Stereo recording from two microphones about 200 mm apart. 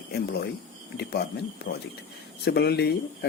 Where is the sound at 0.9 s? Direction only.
55° left (ahead or behind).